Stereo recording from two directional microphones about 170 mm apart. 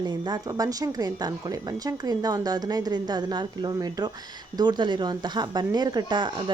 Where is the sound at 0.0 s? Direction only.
25° right (ahead or behind).